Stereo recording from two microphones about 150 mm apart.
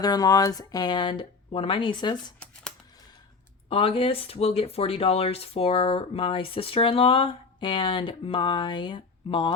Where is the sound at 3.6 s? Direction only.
35° left (ahead or behind).